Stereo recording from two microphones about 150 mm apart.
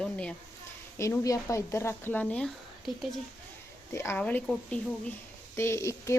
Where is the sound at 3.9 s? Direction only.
20° left (ahead or behind).